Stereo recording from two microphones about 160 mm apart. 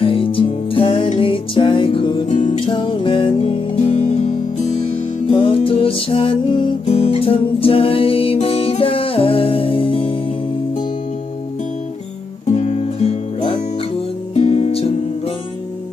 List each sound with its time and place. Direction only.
0.0 s music: 35° left (ahead or behind)
5.3 s music: 35° left (ahead or behind)
6.8 s music: 40° left (ahead or behind)
12.5 s music: 40° left (ahead or behind)